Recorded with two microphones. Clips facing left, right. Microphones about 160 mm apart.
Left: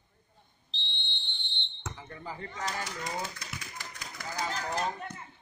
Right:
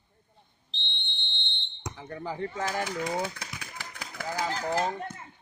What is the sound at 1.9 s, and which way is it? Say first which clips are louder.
Basketball bounce: right 8 dB; 70° right (ahead or behind).